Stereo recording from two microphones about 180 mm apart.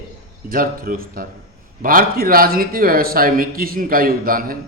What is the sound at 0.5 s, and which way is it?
A man's voice, 50° right (ahead or behind).